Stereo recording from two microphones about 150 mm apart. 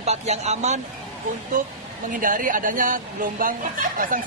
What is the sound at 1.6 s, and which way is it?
Speech, 60° right (ahead or behind).